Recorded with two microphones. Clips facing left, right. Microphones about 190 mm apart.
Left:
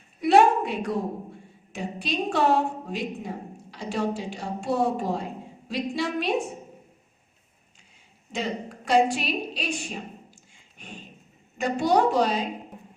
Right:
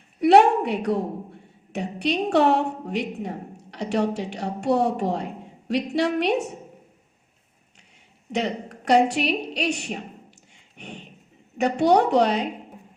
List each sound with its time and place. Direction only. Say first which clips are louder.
0.2 s a woman's voice: right 3 dB; 65° right (ahead or behind)
8.3 s a woman's voice: right 4 dB; 70° right (ahead or behind)
10.5 s a sound: right 5 dB; 70° right (ahead or behind)
11.5 s a woman's voice: right 4 dB; 70° right (ahead or behind)